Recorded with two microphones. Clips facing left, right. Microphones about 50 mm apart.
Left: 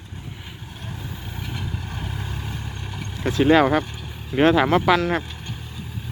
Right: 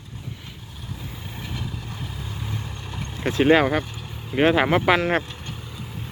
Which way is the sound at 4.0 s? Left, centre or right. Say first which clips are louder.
Left 1 dB; centre.